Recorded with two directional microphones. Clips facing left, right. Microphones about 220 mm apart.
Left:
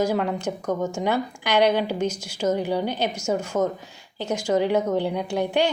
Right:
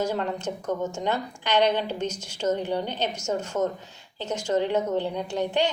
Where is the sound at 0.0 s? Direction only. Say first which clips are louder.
Left 4 dB; 10° left (ahead or behind).